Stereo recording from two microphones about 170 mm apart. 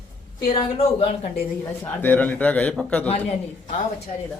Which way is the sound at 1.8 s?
10° left (ahead or behind).